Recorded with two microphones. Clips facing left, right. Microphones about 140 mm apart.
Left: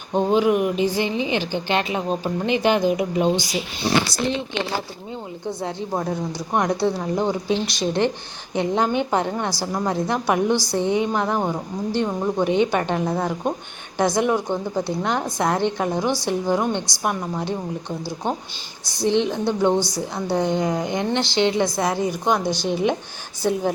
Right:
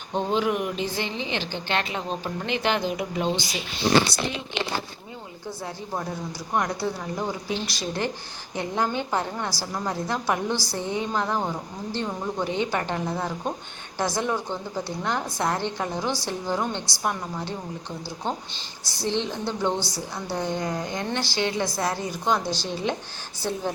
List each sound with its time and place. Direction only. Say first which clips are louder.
0.1 s a woman's voice: left 6 dB; 15° left (ahead or behind)
5.5 s a woman's voice: left 6 dB; 20° left (ahead or behind)
18.9 s a woman's voice: left 7 dB; 15° left (ahead or behind)